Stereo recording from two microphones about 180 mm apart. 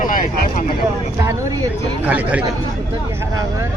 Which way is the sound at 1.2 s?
15° right (ahead or behind).